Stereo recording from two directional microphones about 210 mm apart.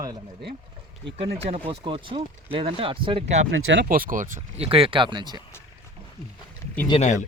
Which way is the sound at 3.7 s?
50° right (ahead or behind).